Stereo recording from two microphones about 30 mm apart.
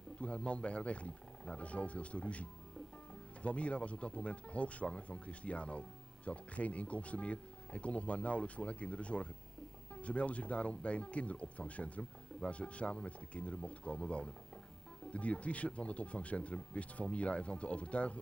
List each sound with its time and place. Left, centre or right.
0.2 s speech: left
3.4 s speech: left
15.0 s speech: left